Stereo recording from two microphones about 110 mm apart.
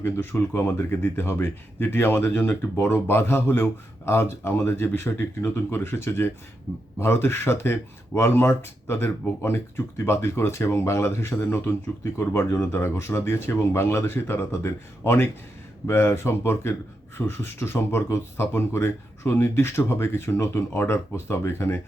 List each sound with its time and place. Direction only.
0.0 s speech: 20° left (ahead or behind)